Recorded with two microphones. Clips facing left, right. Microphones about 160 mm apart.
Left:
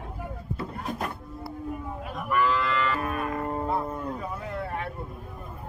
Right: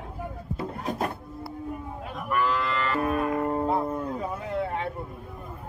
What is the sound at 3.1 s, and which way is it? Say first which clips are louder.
Cattle: right 4 dB; 20° right (ahead or behind).